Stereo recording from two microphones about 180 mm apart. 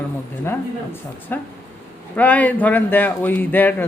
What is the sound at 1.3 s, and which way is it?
Speech, 10° left (ahead or behind).